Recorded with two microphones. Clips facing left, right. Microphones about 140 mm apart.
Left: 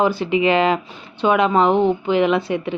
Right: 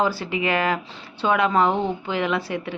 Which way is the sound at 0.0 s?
20° left (ahead or behind).